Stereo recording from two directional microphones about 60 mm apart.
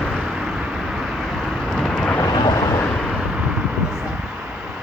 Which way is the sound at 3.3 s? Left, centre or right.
Centre.